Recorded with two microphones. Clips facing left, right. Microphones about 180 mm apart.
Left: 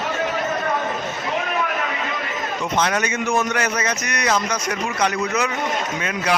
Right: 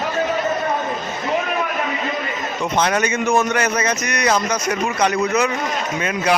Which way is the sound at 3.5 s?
30° right (ahead or behind).